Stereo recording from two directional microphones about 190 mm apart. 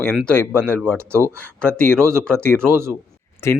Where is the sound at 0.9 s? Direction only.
15° right (ahead or behind).